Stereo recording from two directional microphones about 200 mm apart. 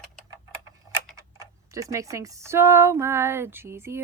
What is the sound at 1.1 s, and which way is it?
Speech, 15° right (ahead or behind).